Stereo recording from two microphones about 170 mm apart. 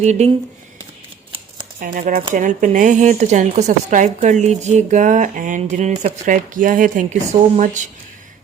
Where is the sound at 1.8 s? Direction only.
50° right (ahead or behind).